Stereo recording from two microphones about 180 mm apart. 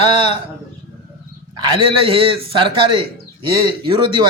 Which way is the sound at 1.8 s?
30° right (ahead or behind).